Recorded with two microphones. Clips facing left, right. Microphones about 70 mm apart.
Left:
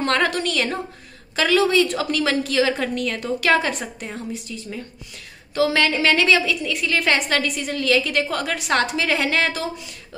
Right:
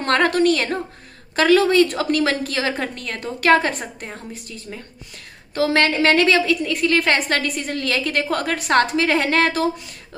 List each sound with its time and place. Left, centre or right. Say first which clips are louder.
0.0 s a woman's voice: right 4 dB; right
5.5 s a woman's voice: right 1 dB; right